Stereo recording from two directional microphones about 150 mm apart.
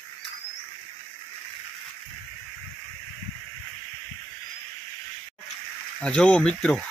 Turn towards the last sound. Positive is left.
turn(degrees=5)  # may be behind; listen again after turning